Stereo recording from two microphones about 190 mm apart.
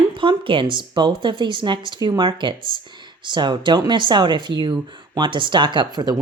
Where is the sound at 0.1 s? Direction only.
25° right (ahead or behind).